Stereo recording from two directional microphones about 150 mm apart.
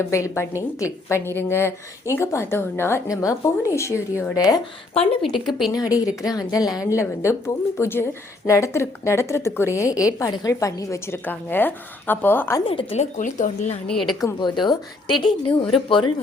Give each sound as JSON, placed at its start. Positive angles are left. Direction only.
{"t": 0.0, "sound": "a woman's voice", "side_deg": 20}
{"t": 5.3, "sound": "a woman's voice", "side_deg": 0}
{"t": 5.7, "sound": "a woman's voice", "side_deg": 25}
{"t": 12.6, "sound": "a woman's voice", "side_deg": 40}
{"t": 13.8, "sound": "a woman's voice", "side_deg": 5}
{"t": 14.1, "sound": "a woman's voice", "side_deg": 25}